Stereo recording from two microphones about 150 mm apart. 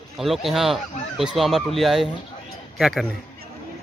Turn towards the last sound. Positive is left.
turn(degrees=0)  # may be behind; listen again after turning